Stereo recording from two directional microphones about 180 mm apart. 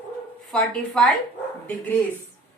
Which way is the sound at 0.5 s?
5° left (ahead or behind).